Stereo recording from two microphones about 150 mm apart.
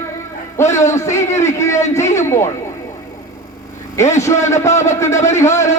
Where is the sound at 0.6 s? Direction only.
20° left (ahead or behind).